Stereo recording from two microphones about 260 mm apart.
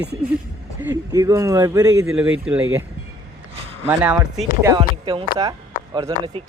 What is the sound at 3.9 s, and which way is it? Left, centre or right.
Speech, centre.